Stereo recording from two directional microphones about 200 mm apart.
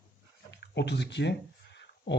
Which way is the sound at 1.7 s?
60° left (ahead or behind).